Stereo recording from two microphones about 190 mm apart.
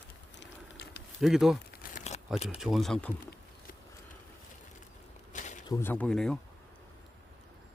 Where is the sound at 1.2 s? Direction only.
Centre (ahead or behind).